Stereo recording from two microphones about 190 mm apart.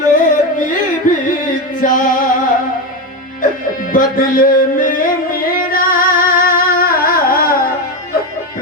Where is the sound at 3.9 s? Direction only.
45° left (ahead or behind).